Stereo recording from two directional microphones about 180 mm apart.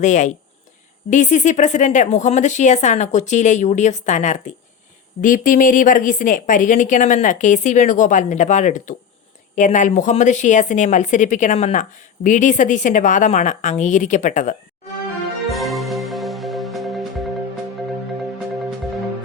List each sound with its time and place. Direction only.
0.0 s a woman's voice: 40° left (ahead or behind)
15.4 s music: centre (ahead or behind)